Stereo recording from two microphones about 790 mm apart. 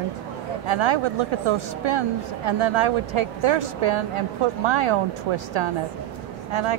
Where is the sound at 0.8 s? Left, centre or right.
Right.